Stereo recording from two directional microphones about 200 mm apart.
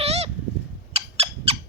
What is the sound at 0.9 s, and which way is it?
Bird, 30° right (ahead or behind).